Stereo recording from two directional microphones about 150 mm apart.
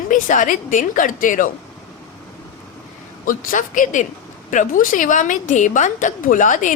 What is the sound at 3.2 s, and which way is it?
A woman's voice, 65° left (ahead or behind).